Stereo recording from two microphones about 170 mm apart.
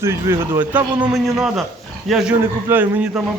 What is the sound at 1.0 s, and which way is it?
A man's voice, centre (ahead or behind).